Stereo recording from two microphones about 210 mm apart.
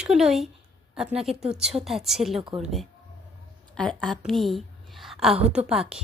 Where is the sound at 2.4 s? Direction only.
25° right (ahead or behind).